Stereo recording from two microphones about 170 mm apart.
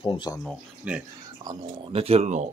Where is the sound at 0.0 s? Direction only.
25° left (ahead or behind).